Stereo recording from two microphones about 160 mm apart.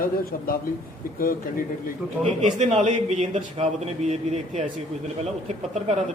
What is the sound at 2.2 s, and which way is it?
A man's voice, 40° right (ahead or behind).